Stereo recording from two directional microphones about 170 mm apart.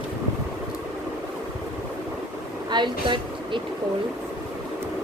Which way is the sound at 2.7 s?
25° right (ahead or behind).